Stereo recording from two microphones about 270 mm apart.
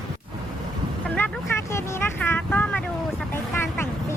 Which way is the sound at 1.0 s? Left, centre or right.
Centre.